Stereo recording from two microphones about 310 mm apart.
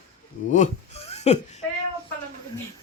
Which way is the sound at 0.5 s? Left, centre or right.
Left.